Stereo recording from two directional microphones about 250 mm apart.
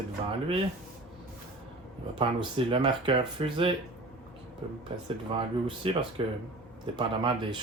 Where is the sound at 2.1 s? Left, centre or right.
Centre.